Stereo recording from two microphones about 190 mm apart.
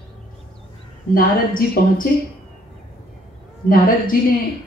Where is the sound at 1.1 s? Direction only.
45° left (ahead or behind).